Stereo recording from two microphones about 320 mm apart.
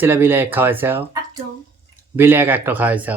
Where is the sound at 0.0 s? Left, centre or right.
Centre.